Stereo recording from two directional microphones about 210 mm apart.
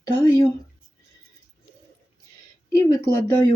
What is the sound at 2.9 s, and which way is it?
Speech, 15° left (ahead or behind).